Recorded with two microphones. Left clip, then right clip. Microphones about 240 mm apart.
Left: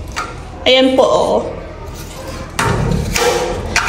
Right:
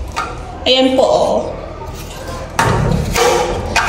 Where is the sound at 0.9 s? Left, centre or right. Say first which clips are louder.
Even; right.